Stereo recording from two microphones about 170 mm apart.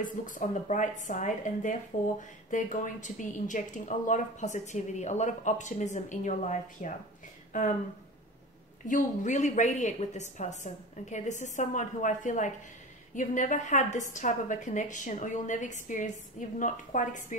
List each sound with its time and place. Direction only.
0.0 s a woman's voice: 50° left (ahead or behind)
8.8 s a woman's voice: 45° left (ahead or behind)